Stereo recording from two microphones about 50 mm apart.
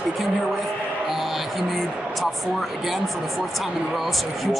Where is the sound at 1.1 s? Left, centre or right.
Centre.